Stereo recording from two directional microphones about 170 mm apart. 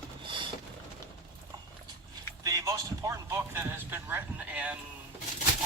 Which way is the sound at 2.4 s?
20° right (ahead or behind).